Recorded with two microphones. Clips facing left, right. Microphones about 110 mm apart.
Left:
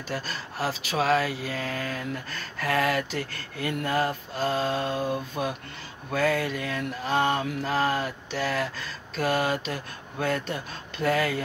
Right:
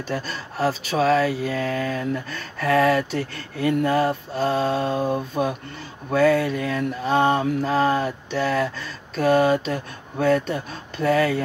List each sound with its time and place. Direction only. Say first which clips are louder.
0.7 s mantra: right 5 dB; 40° right (ahead or behind)